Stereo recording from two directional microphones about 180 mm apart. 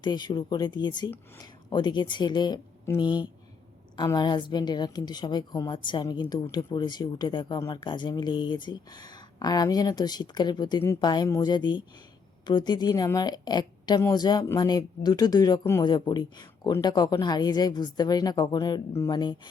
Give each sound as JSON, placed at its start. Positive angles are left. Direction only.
{"t": 0.0, "sound": "a woman's voice", "side_deg": 25}